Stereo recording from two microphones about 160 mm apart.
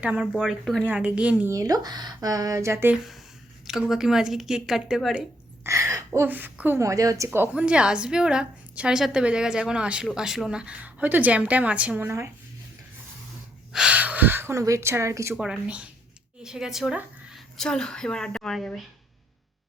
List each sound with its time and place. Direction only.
0.0 s a woman's voice: 5° right (ahead or behind)
1.5 s speech: 20° right (ahead or behind)
2.9 s a woman's voice: centre (ahead or behind)
5.6 s a sound: 20° right (ahead or behind)
6.1 s speech: 10° right (ahead or behind)
7.3 s a woman's voice: 10° right (ahead or behind)
13.7 s speech: 10° right (ahead or behind)
15.4 s a woman's voice: 5° right (ahead or behind)